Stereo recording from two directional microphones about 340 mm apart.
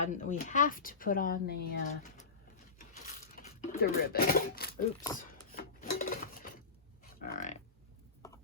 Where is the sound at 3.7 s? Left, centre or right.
Left.